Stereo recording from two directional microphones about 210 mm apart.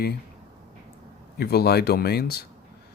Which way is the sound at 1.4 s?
50° left (ahead or behind).